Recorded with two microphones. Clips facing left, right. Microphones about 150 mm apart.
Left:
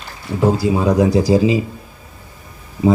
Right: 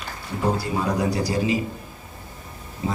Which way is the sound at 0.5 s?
90° left.